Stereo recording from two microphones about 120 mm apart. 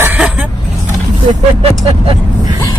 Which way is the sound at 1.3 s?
55° right (ahead or behind).